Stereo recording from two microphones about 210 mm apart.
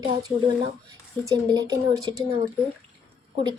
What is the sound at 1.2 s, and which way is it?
Speech, 15° right (ahead or behind).